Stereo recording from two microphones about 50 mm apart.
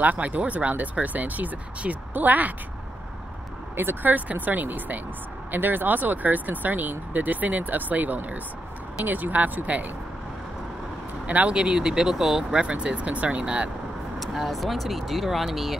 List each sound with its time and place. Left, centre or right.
0.0 s speech: right
3.7 s speech: right
4.1 s speech: right
11.2 s speech: right
11.5 s speech: centre
12.6 s speech: right
14.2 s speech: centre